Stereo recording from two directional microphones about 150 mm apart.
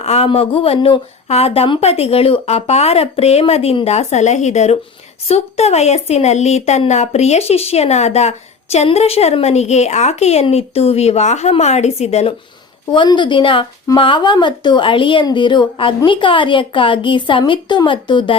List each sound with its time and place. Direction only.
0.0 s speech: 40° left (ahead or behind)
12.9 s a woman's voice: 30° left (ahead or behind)